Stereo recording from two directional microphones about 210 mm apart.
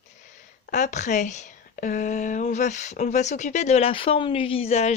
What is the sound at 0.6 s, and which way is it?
Speech, 35° left (ahead or behind).